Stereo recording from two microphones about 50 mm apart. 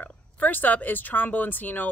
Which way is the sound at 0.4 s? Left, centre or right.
Left.